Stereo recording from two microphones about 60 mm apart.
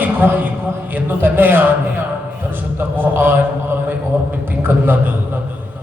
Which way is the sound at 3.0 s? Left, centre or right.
Right.